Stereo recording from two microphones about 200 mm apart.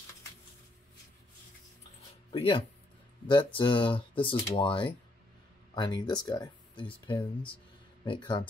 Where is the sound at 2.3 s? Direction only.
30° left (ahead or behind).